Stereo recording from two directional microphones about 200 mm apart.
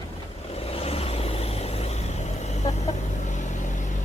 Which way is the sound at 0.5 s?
30° left (ahead or behind).